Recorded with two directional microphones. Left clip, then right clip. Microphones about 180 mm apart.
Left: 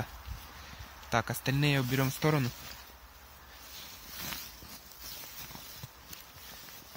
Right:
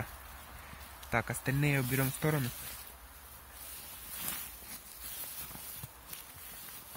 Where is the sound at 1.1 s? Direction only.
25° left (ahead or behind).